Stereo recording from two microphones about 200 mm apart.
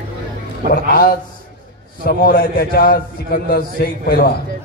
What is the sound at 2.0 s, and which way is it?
A man's voice, 50° left (ahead or behind).